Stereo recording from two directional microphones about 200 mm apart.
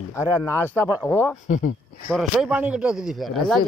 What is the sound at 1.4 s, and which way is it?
Speech, 40° left (ahead or behind).